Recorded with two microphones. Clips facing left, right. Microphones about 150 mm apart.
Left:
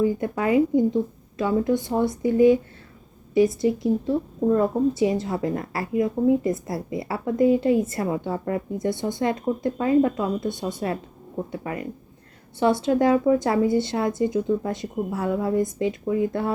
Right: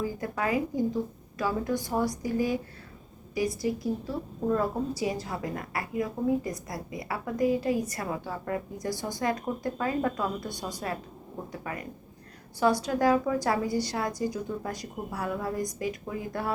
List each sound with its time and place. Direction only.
0.0 s a woman's voice: 25° left (ahead or behind)